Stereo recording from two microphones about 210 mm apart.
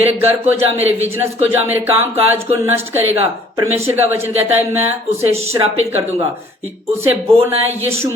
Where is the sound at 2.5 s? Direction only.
10° right (ahead or behind).